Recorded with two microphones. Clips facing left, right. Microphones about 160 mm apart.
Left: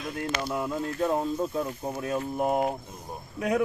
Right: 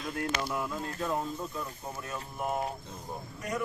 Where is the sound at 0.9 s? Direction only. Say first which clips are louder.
Left 6 dB; 40° left (ahead or behind).